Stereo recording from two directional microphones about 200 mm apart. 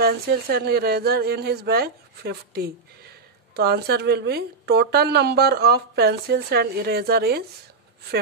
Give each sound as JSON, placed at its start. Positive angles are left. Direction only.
{"t": 0.0, "sound": "speech", "side_deg": -50}